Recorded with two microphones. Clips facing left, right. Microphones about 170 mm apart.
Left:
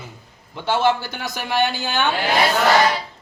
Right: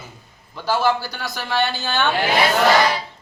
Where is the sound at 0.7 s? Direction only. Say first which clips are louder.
Left 1 dB; 25° left (ahead or behind).